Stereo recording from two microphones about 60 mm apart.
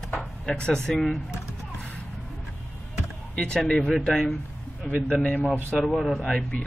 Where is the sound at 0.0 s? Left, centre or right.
Centre.